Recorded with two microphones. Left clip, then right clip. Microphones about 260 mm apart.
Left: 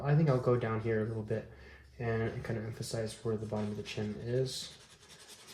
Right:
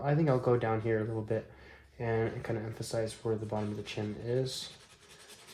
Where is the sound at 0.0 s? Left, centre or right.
Right.